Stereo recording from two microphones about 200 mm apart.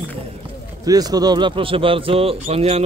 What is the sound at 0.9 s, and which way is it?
Speech, 20° right (ahead or behind).